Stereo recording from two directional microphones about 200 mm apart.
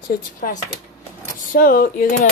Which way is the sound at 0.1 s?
40° left (ahead or behind).